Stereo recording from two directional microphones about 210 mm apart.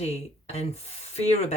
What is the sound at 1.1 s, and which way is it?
Speech, 30° left (ahead or behind).